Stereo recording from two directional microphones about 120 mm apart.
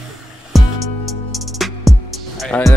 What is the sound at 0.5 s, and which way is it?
Music, centre (ahead or behind).